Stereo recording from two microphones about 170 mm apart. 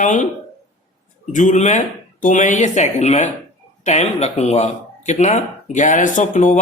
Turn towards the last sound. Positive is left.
turn(degrees=45)  # may be behind; listen again after turning